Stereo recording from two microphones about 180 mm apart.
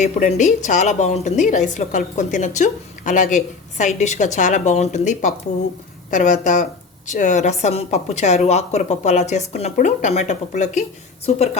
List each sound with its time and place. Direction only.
0.0 s a woman's voice: 40° left (ahead or behind)